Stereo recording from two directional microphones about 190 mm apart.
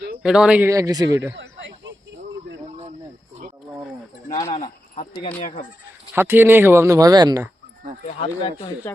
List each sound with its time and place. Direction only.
0.2 s speech: 5° right (ahead or behind)
1.4 s a sound: 75° right (ahead or behind)
4.5 s speech: 40° left (ahead or behind)
6.1 s speech: 10° right (ahead or behind)
8.0 s speech: 30° left (ahead or behind)